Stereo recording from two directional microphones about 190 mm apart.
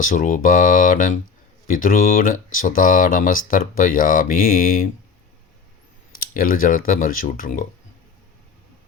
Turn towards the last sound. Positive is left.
turn(degrees=45)  # may be behind; listen again after turning